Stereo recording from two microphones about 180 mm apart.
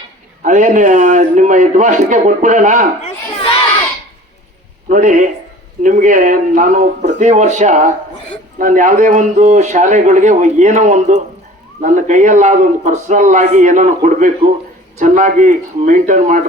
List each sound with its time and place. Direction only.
0.4 s a man's voice: 45° right (ahead or behind)
4.9 s a man's voice: 45° right (ahead or behind)